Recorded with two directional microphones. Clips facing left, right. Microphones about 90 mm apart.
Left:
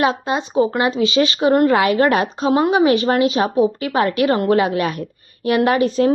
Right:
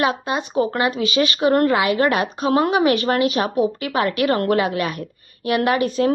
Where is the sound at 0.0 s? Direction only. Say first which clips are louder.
Left 2 dB; 25° left (ahead or behind).